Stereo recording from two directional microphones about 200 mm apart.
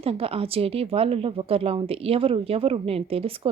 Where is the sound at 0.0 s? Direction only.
30° right (ahead or behind).